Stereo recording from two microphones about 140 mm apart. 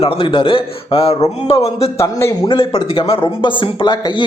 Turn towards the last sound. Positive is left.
turn(degrees=35)  # may be behind; listen again after turning